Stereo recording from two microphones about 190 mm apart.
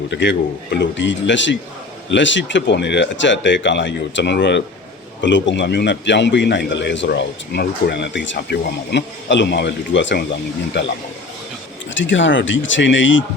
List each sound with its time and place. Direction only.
0.1 s a man's voice: 70° left (ahead or behind)
11.9 s a man's voice: 75° left (ahead or behind)